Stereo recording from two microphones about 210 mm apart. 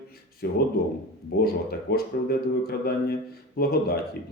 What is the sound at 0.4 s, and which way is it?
Speech, 50° left (ahead or behind).